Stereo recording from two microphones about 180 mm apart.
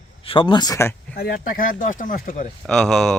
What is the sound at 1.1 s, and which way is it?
Speech, 60° left (ahead or behind).